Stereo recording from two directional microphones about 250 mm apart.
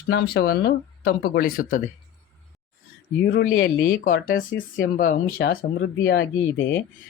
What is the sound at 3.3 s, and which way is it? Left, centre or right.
Speech, left.